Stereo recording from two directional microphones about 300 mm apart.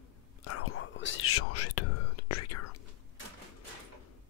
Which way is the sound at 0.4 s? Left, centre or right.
Left.